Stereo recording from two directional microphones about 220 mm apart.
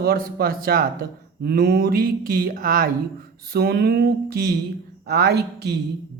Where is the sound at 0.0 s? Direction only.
45° right (ahead or behind).